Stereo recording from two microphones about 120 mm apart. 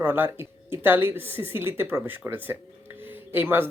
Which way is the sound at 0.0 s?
20° right (ahead or behind).